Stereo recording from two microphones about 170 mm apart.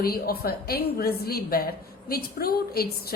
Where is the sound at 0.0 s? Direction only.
65° left (ahead or behind).